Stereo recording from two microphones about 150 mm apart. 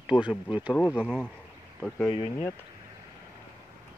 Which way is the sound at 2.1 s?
35° left (ahead or behind).